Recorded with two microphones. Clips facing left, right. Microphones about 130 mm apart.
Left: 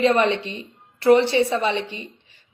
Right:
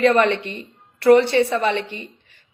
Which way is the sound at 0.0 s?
60° right (ahead or behind).